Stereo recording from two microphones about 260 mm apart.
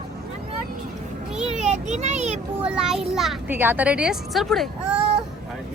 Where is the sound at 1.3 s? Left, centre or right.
Centre.